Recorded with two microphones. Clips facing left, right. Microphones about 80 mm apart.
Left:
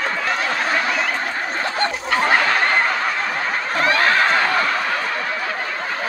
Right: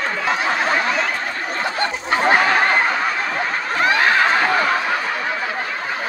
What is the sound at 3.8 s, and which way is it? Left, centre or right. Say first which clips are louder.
Snicker: right 1 dB; centre.